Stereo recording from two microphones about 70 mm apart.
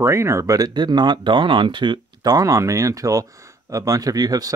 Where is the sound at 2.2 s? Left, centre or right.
Right.